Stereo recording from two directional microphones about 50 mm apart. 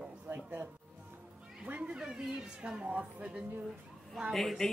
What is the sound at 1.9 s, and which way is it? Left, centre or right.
Speech, centre.